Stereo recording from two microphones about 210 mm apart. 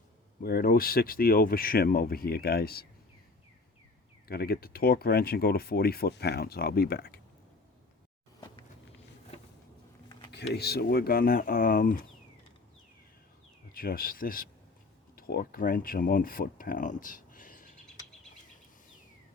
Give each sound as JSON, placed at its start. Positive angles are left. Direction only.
{"t": 0.4, "sound": "speech", "side_deg": 45}
{"t": 4.3, "sound": "speech", "side_deg": 45}
{"t": 8.4, "sound": "a sound", "side_deg": 20}
{"t": 10.3, "sound": "speech", "side_deg": 50}
{"t": 13.7, "sound": "speech", "side_deg": 45}